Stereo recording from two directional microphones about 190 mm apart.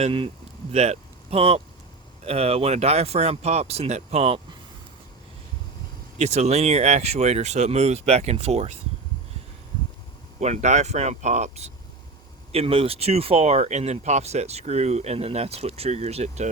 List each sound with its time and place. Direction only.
0.0 s speech: 25° right (ahead or behind)
6.1 s speech: 35° right (ahead or behind)
10.4 s speech: 35° right (ahead or behind)